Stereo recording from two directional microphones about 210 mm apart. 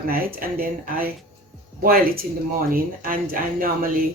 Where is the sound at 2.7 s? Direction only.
40° right (ahead or behind).